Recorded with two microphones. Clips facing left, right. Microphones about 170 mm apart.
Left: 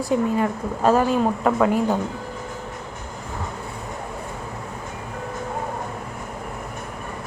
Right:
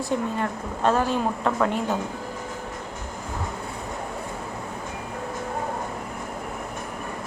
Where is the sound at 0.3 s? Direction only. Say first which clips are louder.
Left 5 dB; 5° left (ahead or behind).